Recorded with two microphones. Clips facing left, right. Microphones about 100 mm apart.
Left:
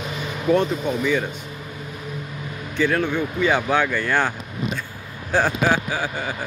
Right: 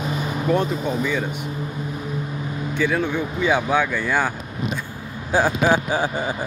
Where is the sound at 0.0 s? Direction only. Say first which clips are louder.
Right 4 dB; 40° right (ahead or behind).